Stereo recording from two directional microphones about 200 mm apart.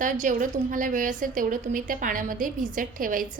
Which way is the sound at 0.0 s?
40° right (ahead or behind).